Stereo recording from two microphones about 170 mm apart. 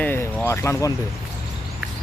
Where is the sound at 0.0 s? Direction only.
10° left (ahead or behind).